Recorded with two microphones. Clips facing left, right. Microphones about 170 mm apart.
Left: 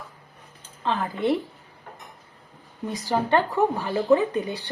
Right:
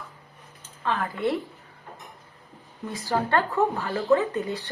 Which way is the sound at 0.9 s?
20° left (ahead or behind).